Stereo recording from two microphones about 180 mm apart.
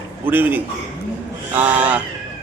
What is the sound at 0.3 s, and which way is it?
Speech, 10° right (ahead or behind).